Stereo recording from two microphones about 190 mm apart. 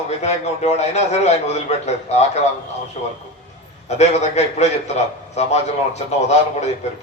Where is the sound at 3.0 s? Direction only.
35° left (ahead or behind).